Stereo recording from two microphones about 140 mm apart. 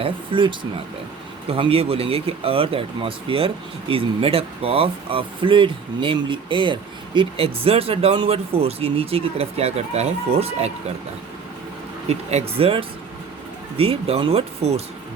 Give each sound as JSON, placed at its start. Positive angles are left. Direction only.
{"t": 0.0, "sound": "speech", "side_deg": -35}
{"t": 12.0, "sound": "speech", "side_deg": -50}